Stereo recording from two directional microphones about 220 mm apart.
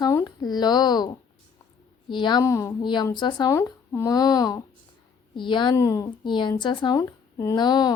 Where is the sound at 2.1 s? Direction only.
20° left (ahead or behind).